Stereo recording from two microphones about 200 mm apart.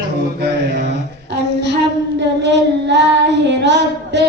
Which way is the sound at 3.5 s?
60° right (ahead or behind).